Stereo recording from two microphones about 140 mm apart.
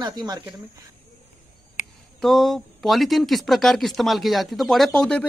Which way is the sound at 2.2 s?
Centre (ahead or behind).